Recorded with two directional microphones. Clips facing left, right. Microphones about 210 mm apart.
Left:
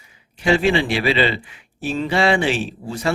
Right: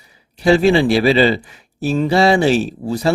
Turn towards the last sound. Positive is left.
turn(degrees=-40)  # may be behind; listen again after turning